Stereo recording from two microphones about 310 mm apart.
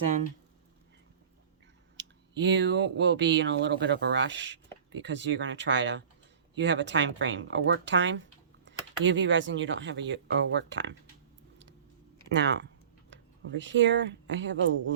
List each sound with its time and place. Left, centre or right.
2.0 s speech: right
12.3 s speech: right